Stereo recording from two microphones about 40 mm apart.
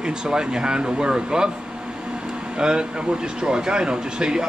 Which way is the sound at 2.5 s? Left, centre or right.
Centre.